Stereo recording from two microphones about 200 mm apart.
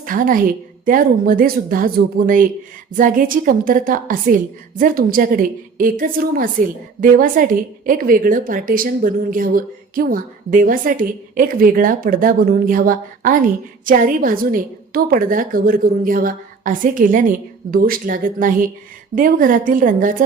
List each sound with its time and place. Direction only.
0.0 s a woman's voice: 45° right (ahead or behind)